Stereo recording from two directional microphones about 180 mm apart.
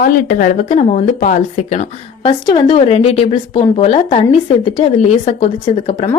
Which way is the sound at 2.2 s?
25° left (ahead or behind).